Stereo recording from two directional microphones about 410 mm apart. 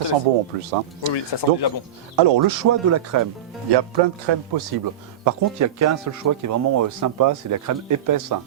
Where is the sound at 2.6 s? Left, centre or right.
Right.